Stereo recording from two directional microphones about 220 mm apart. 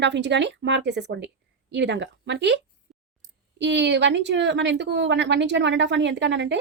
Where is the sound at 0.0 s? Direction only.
50° right (ahead or behind).